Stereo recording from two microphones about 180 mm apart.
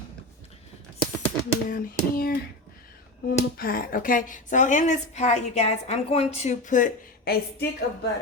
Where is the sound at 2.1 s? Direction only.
55° left (ahead or behind).